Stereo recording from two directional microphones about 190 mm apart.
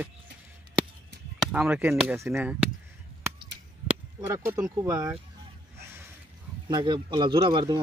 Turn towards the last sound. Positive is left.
turn(degrees=-20)  # may be behind; listen again after turning